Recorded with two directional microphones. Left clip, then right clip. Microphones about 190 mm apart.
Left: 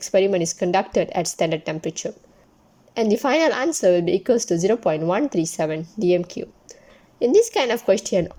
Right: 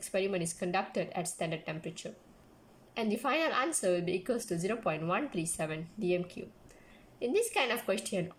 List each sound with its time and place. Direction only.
0.0 s a woman's voice: 35° left (ahead or behind)